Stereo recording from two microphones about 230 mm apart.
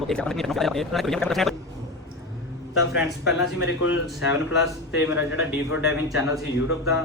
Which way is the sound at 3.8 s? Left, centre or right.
Left.